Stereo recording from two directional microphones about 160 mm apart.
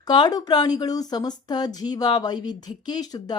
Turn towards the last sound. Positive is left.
turn(degrees=25)  # may be behind; listen again after turning